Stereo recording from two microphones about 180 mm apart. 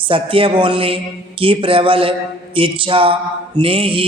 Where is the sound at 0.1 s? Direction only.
30° right (ahead or behind).